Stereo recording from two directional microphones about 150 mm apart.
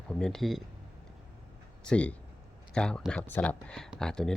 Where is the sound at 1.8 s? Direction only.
5° left (ahead or behind).